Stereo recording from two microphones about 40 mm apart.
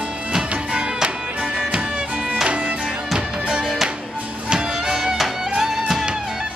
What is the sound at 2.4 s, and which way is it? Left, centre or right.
Music, right.